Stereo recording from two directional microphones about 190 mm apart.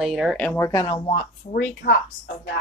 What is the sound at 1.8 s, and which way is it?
Speech, 55° left (ahead or behind).